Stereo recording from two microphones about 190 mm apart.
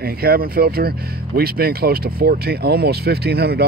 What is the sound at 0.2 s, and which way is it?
Speech, 55° right (ahead or behind).